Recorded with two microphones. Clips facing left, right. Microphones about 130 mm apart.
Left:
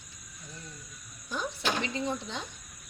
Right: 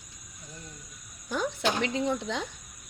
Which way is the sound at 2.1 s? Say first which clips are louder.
Right 5 dB; 90° right.